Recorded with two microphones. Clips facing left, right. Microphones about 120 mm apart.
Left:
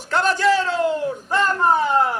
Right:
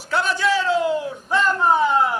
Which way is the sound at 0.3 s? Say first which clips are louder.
Left 1 dB; 45° left (ahead or behind).